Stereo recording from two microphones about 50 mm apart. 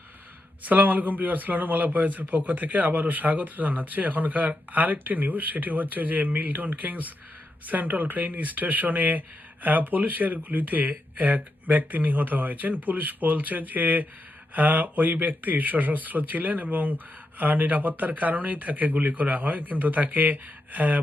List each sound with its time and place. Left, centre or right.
0.6 s speech: right